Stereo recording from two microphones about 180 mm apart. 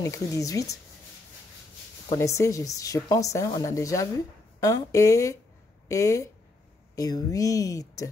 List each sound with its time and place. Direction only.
0.0 s speech: 20° left (ahead or behind)
2.0 s speech: 15° left (ahead or behind)